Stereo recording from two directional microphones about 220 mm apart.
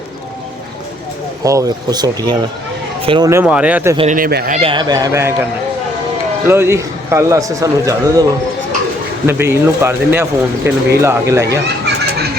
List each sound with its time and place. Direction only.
1.5 s speech: 15° right (ahead or behind)
3.2 s speech: 10° right (ahead or behind)
3.9 s speech: 30° right (ahead or behind)
4.6 s speech: 20° right (ahead or behind)
6.5 s speech: 10° right (ahead or behind)
9.2 s speech: 10° right (ahead or behind)